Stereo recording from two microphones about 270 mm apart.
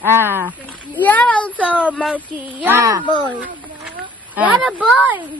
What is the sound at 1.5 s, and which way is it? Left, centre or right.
A woman's voice, centre.